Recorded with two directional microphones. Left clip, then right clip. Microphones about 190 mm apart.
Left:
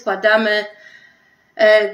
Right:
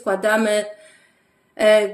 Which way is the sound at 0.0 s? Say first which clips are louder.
Left 4 dB; 55° right (ahead or behind).